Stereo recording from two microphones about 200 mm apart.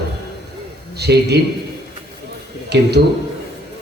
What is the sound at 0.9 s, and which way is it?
Speech, 55° right (ahead or behind).